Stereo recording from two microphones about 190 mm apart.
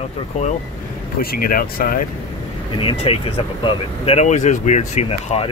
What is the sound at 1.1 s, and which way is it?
Speech, 50° left (ahead or behind).